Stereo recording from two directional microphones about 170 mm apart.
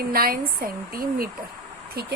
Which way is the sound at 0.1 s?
60° right (ahead or behind).